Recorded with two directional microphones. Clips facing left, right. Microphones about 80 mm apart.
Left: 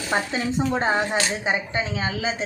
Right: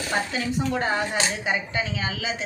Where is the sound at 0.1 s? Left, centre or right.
Left.